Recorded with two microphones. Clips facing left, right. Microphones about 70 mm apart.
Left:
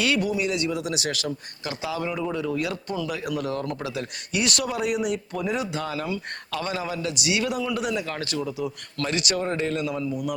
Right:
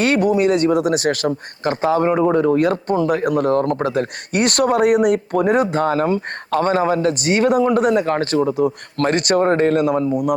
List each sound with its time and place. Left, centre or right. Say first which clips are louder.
0.0 s speech: right 9 dB; right